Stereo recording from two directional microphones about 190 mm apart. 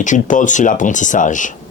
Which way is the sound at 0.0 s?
40° left (ahead or behind).